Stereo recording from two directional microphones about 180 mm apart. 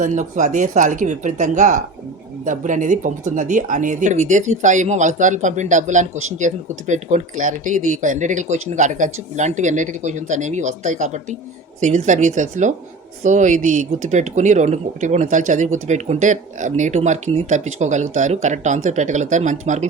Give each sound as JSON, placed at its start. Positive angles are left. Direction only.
{"t": 0.0, "sound": "speech", "side_deg": -45}